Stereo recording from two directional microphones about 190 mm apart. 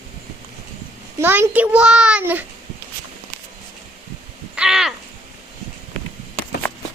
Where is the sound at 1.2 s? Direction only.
10° right (ahead or behind).